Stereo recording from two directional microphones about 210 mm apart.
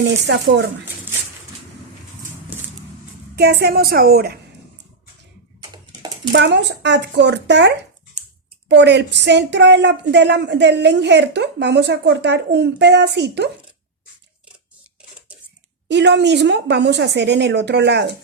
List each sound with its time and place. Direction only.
0.3 s speech: 55° right (ahead or behind)
3.3 s a woman's voice: 50° right (ahead or behind)
5.7 s a sound: 20° right (ahead or behind)
6.3 s speech: 55° right (ahead or behind)
8.7 s speech: 55° right (ahead or behind)
15.9 s speech: 55° right (ahead or behind)